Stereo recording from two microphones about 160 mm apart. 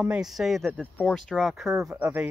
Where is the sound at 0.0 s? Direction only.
5° right (ahead or behind).